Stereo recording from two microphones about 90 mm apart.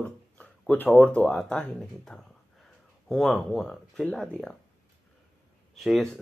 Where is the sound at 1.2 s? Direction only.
5° left (ahead or behind).